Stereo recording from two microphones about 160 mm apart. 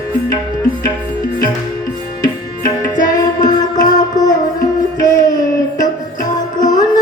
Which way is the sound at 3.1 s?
25° left (ahead or behind).